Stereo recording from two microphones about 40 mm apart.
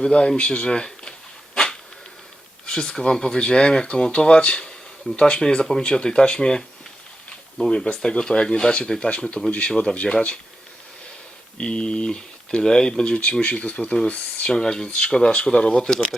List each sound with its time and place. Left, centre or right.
0.0 s speech: left
1.5 s dog: centre
2.6 s speech: left
11.5 s speech: left
13.4 s speech: left
14.4 s speech: left
14.8 s speech: left